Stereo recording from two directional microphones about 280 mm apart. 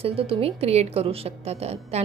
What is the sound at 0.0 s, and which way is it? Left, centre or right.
A woman's voice, centre.